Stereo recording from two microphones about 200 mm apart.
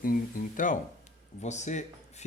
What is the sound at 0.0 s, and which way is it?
Speech, 45° left (ahead or behind).